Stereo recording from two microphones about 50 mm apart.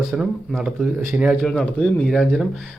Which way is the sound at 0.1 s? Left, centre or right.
Centre.